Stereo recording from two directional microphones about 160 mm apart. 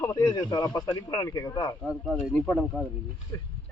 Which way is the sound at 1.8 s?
Centre (ahead or behind).